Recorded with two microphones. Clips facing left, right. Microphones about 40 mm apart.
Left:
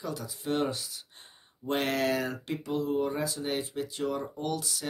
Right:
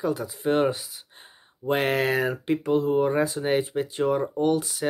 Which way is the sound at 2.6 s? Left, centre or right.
Right.